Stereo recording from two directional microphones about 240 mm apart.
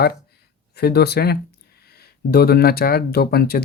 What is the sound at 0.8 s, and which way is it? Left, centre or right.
Speech, left.